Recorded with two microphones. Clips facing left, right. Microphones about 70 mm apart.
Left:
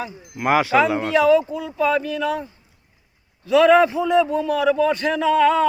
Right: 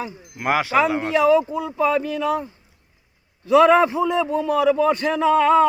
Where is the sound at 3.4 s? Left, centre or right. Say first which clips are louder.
Even; centre.